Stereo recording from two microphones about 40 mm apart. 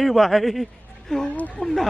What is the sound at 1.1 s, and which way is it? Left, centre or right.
Speech, centre.